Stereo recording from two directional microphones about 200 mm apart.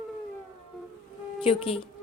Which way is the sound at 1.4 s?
30° left (ahead or behind).